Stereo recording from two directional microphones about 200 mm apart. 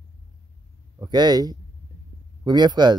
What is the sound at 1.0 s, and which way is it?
Speech, 20° right (ahead or behind).